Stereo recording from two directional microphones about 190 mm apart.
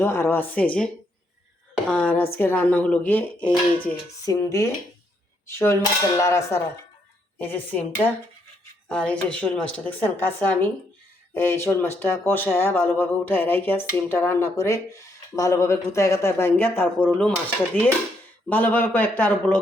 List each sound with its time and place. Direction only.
0.0 s speech: 15° left (ahead or behind)
1.9 s speech: 5° left (ahead or behind)
4.3 s speech: 15° left (ahead or behind)
18.4 s speech: 10° left (ahead or behind)